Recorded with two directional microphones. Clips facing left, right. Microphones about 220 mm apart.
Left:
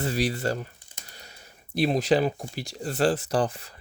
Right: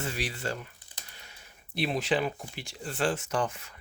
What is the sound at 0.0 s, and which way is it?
Speech, 40° left (ahead or behind).